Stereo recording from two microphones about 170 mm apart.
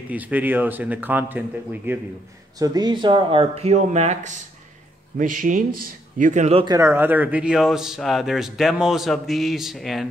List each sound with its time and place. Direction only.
0.1 s speech: 10° right (ahead or behind)
2.6 s speech: 25° right (ahead or behind); by 4.4 s 45° right (ahead or behind)
5.1 s speech: 55° right (ahead or behind)
6.6 s speech: 20° right (ahead or behind); by 10.0 s centre (ahead or behind)